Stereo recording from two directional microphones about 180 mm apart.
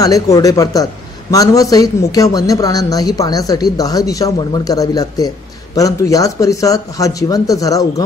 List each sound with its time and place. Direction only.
0.0 s speech: 20° left (ahead or behind)